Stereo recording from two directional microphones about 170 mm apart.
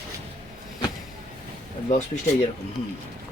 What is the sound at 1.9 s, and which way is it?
Speech, 45° left (ahead or behind).